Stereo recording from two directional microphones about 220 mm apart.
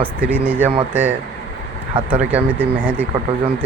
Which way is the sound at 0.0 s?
10° right (ahead or behind).